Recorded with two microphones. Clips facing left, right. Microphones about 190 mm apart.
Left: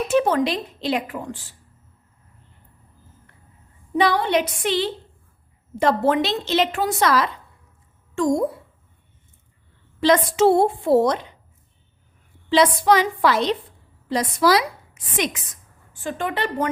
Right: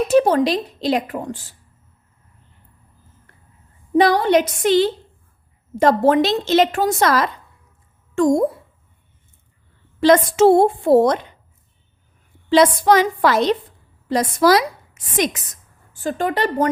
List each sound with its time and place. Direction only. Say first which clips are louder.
0.1 s a woman's voice: right 4 dB; 35° right (ahead or behind)
3.9 s a woman's voice: right 5 dB; 45° right (ahead or behind)
10.0 s a woman's voice: right 4 dB; 45° right (ahead or behind)
12.5 s a woman's voice: right 3 dB; 45° right (ahead or behind)